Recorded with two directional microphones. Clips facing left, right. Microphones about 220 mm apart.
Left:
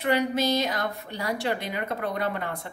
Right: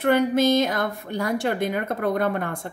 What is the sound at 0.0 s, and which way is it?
A woman's voice, 50° right (ahead or behind).